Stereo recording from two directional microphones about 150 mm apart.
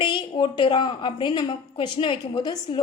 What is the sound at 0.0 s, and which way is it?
A woman's voice, 30° left (ahead or behind).